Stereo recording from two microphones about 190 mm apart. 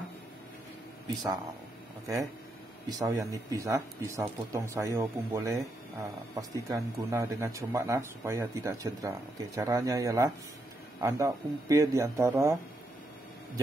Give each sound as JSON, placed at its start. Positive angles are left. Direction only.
{"t": 1.0, "sound": "speech", "side_deg": -20}
{"t": 2.9, "sound": "speech", "side_deg": -15}
{"t": 6.7, "sound": "speech", "side_deg": -15}